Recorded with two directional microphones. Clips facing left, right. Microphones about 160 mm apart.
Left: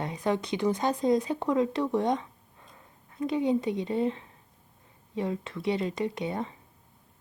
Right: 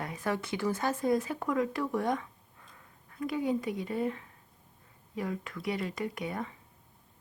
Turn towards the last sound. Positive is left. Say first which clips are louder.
# left 4 dB
turn(degrees=25)  # may be behind; listen again after turning